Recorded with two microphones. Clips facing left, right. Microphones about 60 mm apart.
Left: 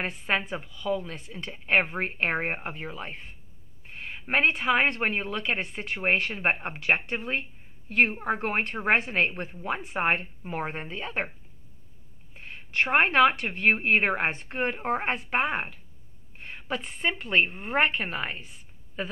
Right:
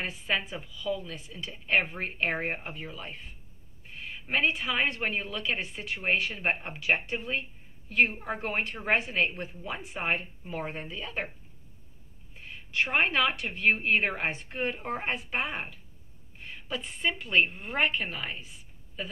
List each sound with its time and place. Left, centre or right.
0.0 s a woman's voice: left
12.4 s a woman's voice: left